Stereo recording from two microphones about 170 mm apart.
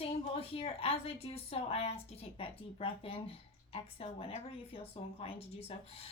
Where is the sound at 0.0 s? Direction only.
35° left (ahead or behind).